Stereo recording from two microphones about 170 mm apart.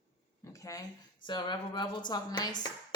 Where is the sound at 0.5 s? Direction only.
20° left (ahead or behind).